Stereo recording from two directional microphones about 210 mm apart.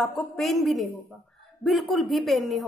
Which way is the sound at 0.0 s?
Centre (ahead or behind).